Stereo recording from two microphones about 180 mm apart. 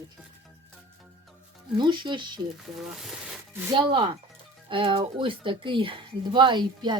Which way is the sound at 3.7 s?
25° right (ahead or behind).